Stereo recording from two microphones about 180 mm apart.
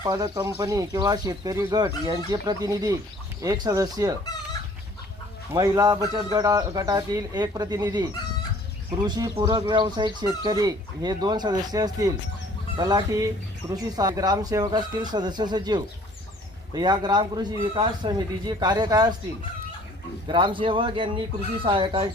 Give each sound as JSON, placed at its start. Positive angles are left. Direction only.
{"t": 0.0, "sound": "speech", "side_deg": -20}
{"t": 5.5, "sound": "speech", "side_deg": -20}
{"t": 9.0, "sound": "speech", "side_deg": -20}
{"t": 20.2, "sound": "speech", "side_deg": -25}